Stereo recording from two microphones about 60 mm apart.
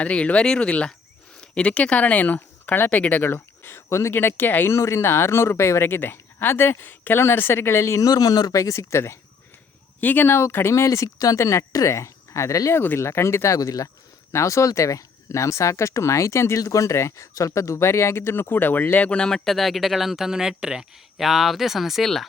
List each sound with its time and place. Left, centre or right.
0.0 s speech: centre; by 4.1 s left
4.1 s speech: left
4.7 s speech: left
8.0 s speech: left
10.0 s speech: left
12.7 s speech: left
13.0 s speech: left
13.6 s speech: left
14.3 s speech: left
16.6 s speech: left
19.1 s speech: centre